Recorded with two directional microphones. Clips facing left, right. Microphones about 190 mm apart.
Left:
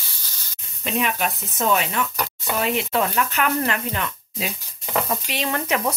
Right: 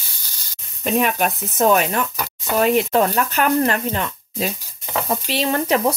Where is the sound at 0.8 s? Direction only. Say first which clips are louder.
Right 5 dB; 45° right (ahead or behind).